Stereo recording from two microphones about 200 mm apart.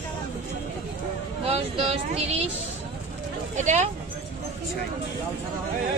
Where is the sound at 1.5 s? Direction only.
30° right (ahead or behind).